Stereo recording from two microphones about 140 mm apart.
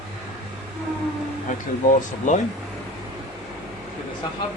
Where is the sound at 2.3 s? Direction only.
65° left (ahead or behind).